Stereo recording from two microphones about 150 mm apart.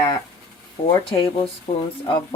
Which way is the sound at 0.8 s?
35° left (ahead or behind).